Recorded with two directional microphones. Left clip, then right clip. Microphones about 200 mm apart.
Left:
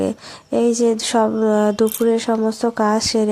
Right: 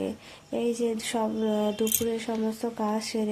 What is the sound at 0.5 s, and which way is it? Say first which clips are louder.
Speech: left 11 dB; 30° left (ahead or behind).